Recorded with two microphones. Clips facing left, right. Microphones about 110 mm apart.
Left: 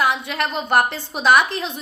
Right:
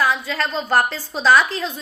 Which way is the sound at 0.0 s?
20° left (ahead or behind).